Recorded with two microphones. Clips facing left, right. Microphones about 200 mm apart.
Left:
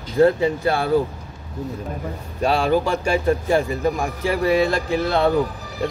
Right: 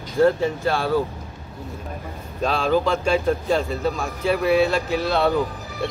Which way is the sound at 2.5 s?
15° left (ahead or behind).